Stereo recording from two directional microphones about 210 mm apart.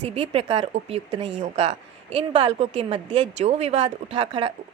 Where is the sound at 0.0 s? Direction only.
30° right (ahead or behind).